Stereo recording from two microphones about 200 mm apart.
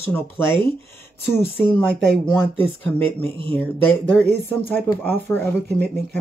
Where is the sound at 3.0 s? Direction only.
30° right (ahead or behind).